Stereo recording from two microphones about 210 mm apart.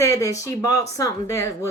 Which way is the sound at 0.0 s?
15° left (ahead or behind).